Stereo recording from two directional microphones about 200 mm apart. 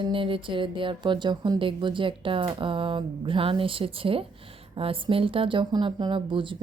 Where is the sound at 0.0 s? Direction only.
25° right (ahead or behind).